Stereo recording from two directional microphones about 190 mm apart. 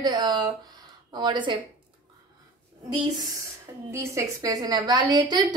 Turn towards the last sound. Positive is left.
turn(degrees=-20)  # may be behind; listen again after turning